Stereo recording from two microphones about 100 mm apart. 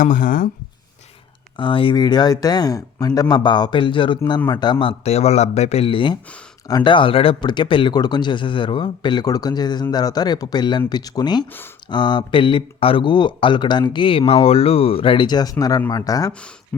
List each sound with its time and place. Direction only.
1.5 s speech: 55° left (ahead or behind)
2.0 s speech: 45° left (ahead or behind); by 6.1 s 60° left (ahead or behind)
6.7 s speech: 40° left (ahead or behind)
6.9 s speech: 60° left (ahead or behind)
9.2 s speech: 40° left (ahead or behind)